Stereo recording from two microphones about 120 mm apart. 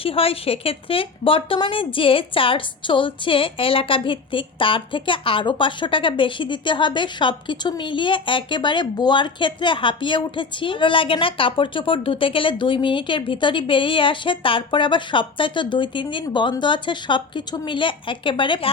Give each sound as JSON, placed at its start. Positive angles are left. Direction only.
{"t": 0.0, "sound": "a woman's voice", "side_deg": 50}